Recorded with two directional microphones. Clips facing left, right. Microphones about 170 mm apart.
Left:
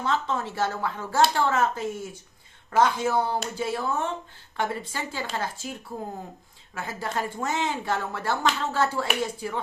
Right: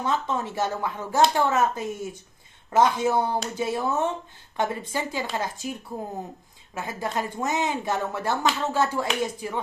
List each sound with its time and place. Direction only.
0.0 s speech: 20° right (ahead or behind)
6.7 s speech: 20° right (ahead or behind)